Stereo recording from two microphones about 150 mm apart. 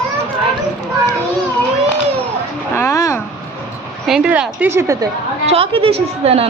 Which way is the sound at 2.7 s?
20° left (ahead or behind).